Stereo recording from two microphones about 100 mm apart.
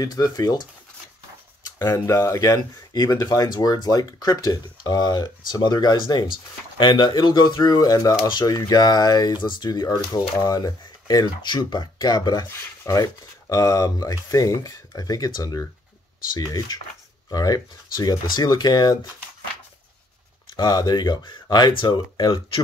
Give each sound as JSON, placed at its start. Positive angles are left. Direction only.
{"t": 0.0, "sound": "speech", "side_deg": 40}
{"t": 2.0, "sound": "speech", "side_deg": 30}
{"t": 20.5, "sound": "speech", "side_deg": 45}